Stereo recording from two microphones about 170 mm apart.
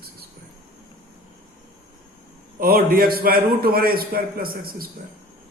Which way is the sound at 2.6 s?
60° right (ahead or behind).